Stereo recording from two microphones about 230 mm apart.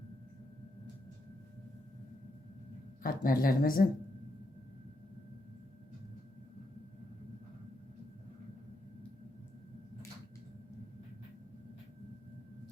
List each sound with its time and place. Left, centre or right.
3.0 s speech: left